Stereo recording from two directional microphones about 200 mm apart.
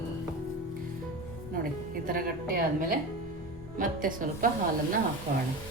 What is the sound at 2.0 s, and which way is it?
Speech, 45° right (ahead or behind).